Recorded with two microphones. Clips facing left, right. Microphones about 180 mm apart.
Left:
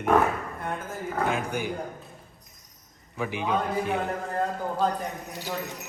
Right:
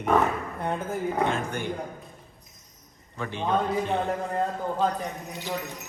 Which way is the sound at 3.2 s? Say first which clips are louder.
Right 1 dB; 10° left (ahead or behind).